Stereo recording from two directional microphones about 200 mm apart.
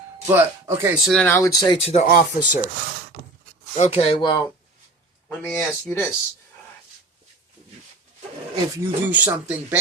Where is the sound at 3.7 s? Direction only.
30° left (ahead or behind).